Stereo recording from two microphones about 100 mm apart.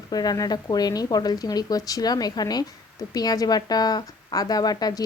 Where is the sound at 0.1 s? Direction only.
40° left (ahead or behind).